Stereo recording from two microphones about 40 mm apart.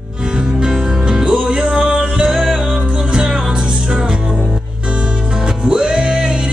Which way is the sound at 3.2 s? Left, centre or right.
Centre.